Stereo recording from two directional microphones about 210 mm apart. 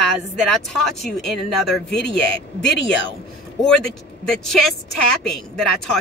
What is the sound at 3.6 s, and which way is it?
A woman's voice, centre (ahead or behind).